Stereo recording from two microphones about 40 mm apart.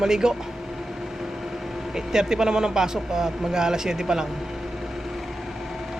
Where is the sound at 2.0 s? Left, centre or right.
Centre.